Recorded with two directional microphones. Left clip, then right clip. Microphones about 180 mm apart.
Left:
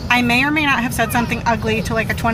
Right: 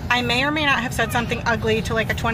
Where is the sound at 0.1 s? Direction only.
5° left (ahead or behind).